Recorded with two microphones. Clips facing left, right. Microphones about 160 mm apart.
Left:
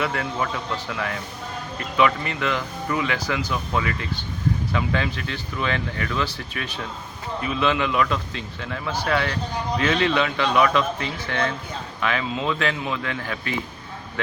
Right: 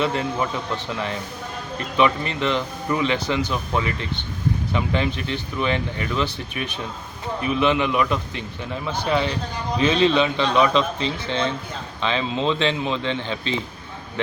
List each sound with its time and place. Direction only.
0.0 s a man's voice: 25° right (ahead or behind)